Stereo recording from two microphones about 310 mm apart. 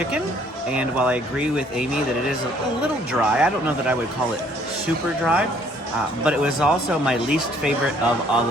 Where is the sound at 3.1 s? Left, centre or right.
Centre.